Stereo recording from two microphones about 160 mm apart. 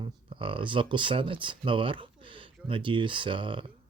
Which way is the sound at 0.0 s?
35° right (ahead or behind).